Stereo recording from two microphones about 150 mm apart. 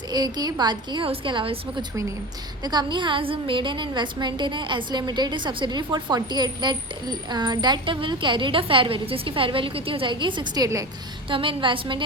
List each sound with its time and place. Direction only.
0.1 s a woman's voice: 25° right (ahead or behind)
2.6 s a woman's voice: 30° right (ahead or behind)
11.3 s a woman's voice: 35° right (ahead or behind)